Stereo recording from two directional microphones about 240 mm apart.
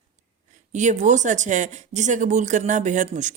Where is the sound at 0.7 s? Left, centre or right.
Right.